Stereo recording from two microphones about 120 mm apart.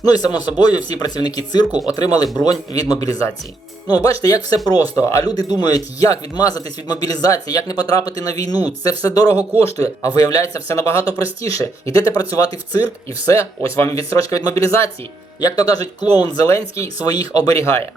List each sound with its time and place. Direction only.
0.0 s speech: 35° left (ahead or behind)